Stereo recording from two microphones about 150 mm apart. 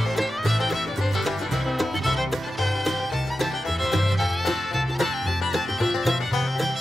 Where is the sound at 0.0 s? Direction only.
Centre (ahead or behind).